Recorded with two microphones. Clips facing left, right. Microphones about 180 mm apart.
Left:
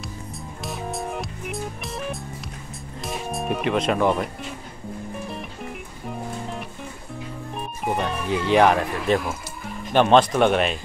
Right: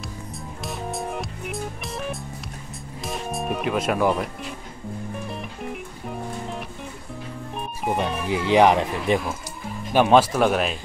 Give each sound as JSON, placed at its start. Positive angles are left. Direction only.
{"t": 0.3, "sound": "music", "side_deg": 0}
{"t": 8.3, "sound": "speech", "side_deg": -15}